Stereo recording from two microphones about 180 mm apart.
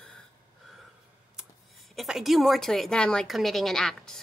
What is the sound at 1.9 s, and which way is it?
A woman's voice, centre (ahead or behind).